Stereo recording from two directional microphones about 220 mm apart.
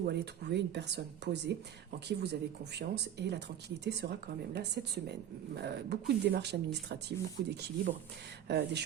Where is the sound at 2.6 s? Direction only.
50° right (ahead or behind).